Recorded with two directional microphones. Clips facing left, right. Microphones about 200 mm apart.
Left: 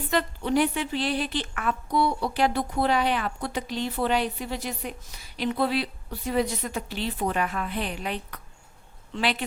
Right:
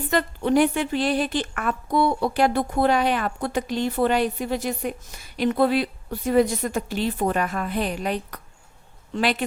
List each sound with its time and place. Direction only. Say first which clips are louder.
0.1 s a woman's voice: right 4 dB; 50° right (ahead or behind)